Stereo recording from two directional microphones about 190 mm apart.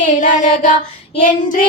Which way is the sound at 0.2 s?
40° left (ahead or behind).